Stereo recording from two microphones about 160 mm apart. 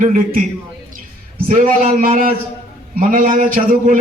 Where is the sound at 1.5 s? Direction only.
60° right (ahead or behind).